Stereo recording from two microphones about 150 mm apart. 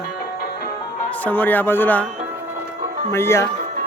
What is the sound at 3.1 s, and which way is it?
Speech, 15° left (ahead or behind).